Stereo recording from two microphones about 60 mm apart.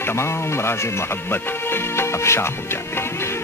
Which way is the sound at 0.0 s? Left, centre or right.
Left.